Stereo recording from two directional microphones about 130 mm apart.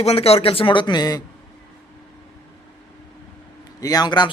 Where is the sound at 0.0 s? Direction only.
50° left (ahead or behind); by 1.2 s 30° left (ahead or behind).